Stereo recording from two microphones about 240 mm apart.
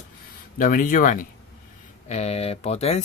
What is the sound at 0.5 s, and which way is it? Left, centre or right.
Speech, left.